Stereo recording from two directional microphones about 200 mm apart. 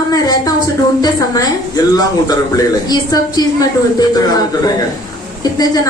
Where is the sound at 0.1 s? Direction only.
20° left (ahead or behind).